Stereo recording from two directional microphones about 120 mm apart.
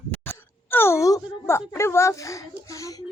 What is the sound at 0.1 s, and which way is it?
Speech, 15° left (ahead or behind).